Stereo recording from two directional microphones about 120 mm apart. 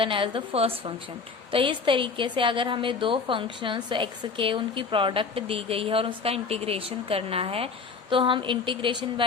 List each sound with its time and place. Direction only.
0.0 s a woman's voice: 45° right (ahead or behind)